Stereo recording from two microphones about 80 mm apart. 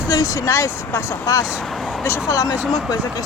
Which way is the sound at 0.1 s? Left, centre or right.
Left.